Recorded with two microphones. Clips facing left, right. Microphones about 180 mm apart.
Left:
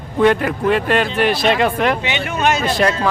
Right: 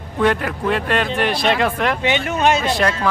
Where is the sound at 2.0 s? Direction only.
45° right (ahead or behind).